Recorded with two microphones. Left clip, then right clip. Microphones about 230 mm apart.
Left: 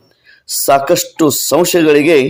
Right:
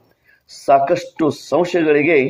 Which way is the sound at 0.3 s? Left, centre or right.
Left.